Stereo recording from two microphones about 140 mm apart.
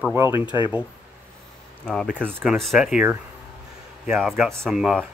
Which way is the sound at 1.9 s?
5° left (ahead or behind).